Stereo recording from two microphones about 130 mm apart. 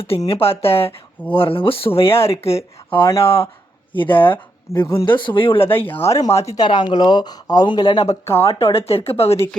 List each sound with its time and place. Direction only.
0.0 s speech: 50° left (ahead or behind)
0.9 s speech: 15° left (ahead or behind)
1.4 s speech: 45° left (ahead or behind)
5.5 s speech: 15° left (ahead or behind)
6.6 s speech: 35° left (ahead or behind)
8.4 s speech: 50° left (ahead or behind)